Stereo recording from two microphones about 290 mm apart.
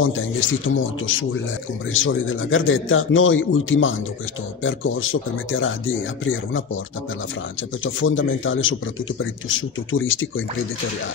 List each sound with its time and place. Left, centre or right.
0.0 s speech: left
7.8 s speech: left